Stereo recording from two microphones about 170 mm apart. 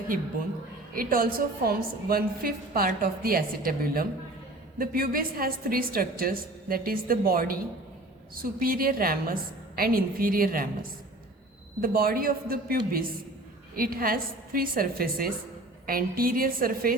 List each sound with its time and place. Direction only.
0.9 s a woman's voice: 60° right (ahead or behind)
11.8 s a woman's voice: 60° right (ahead or behind)